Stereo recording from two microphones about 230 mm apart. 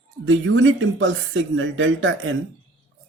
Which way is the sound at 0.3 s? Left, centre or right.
Right.